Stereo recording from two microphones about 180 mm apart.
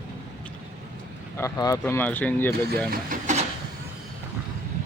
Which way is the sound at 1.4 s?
20° left (ahead or behind).